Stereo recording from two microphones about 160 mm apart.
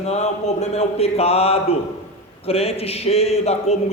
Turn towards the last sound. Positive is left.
turn(degrees=40)  # may be behind; listen again after turning